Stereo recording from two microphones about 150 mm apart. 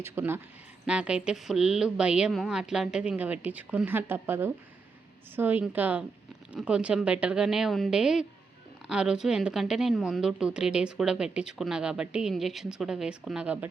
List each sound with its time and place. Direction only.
0.0 s a woman's voice: 15° right (ahead or behind)